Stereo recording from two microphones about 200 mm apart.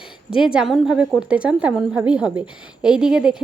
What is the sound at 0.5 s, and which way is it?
A woman's voice, centre (ahead or behind).